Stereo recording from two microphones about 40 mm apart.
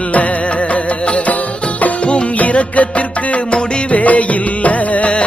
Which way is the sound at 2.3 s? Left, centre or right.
Left.